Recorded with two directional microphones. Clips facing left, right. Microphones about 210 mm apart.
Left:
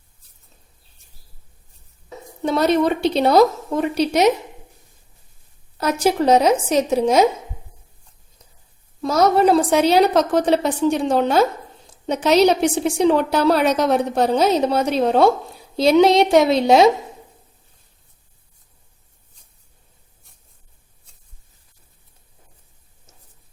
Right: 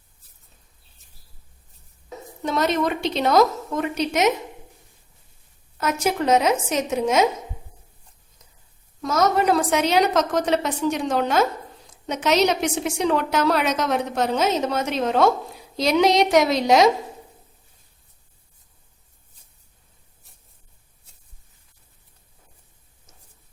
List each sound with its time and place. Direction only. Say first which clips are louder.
2.4 s a woman's voice: left 5 dB; 35° left (ahead or behind)
5.7 s a woman's voice: left 4 dB; 35° left (ahead or behind)
9.0 s a woman's voice: left 4 dB; 35° left (ahead or behind)